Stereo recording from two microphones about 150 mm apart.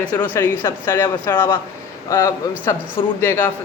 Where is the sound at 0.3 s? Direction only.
15° left (ahead or behind).